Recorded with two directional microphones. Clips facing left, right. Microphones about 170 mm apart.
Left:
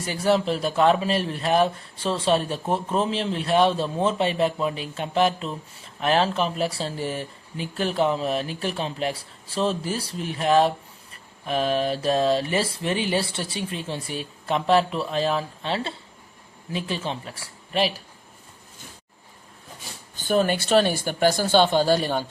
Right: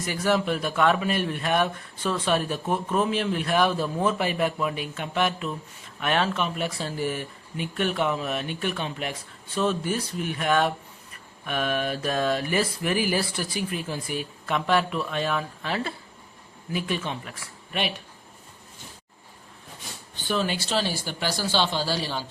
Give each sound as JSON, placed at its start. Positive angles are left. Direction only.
{"t": 0.0, "sound": "a man's voice", "side_deg": 30}
{"t": 11.1, "sound": "mantra", "side_deg": 30}
{"t": 16.7, "sound": "a man's voice", "side_deg": 30}
{"t": 20.1, "sound": "speech", "side_deg": 45}